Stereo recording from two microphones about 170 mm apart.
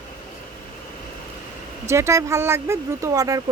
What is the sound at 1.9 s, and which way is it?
Speech, 15° right (ahead or behind).